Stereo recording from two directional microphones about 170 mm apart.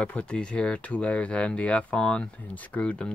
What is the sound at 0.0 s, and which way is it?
Speech, 5° left (ahead or behind).